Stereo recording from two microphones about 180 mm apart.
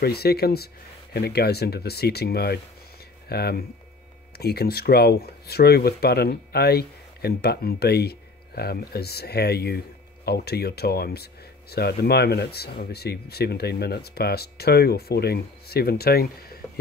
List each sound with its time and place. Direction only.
0.0 s speech: 60° left (ahead or behind)